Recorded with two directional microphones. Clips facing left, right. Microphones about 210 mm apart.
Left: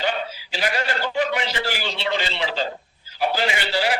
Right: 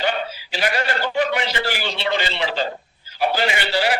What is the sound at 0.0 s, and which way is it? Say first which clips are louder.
A man's voice: right 2 dB; 65° right (ahead or behind).